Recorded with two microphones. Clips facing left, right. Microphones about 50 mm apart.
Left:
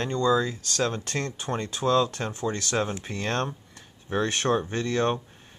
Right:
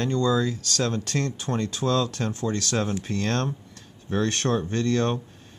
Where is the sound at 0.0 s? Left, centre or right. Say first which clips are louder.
Even; centre.